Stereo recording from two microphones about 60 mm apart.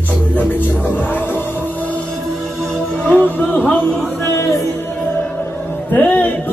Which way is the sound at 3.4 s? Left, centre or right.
Left.